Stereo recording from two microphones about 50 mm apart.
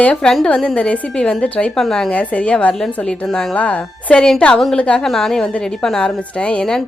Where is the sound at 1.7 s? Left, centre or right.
Centre.